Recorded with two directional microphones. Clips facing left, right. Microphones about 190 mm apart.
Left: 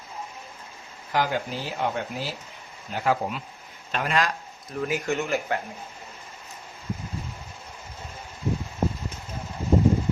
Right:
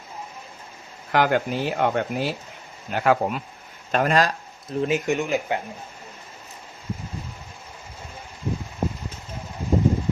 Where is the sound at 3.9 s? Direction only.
45° right (ahead or behind); by 5.6 s 15° right (ahead or behind).